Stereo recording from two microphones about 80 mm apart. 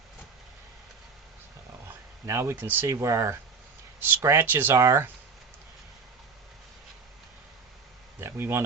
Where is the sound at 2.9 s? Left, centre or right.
Right.